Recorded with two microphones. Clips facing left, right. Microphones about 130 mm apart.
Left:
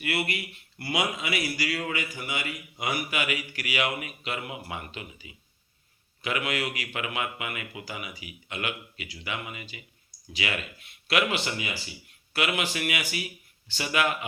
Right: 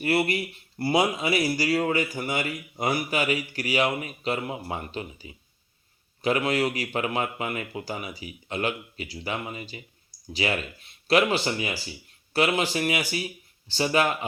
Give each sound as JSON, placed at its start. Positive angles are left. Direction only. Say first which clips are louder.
{"t": 0.0, "sound": "speech", "louder": "right 6 dB", "side_deg": -35}